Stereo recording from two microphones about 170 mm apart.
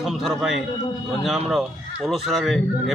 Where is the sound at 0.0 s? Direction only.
Centre (ahead or behind).